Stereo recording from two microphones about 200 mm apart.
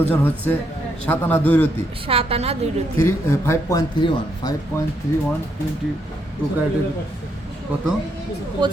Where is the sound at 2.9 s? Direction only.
10° left (ahead or behind).